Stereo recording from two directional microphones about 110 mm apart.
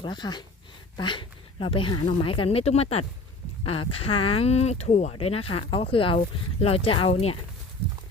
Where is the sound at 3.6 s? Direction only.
55° left (ahead or behind); by 5.1 s 90° left.